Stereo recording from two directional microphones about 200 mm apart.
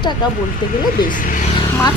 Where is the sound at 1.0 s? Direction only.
40° left (ahead or behind).